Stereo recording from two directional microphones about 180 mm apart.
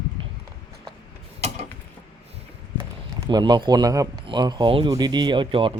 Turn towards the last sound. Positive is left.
turn(degrees=-30)  # may be behind; listen again after turning